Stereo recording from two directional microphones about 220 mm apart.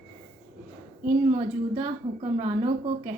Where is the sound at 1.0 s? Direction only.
30° right (ahead or behind).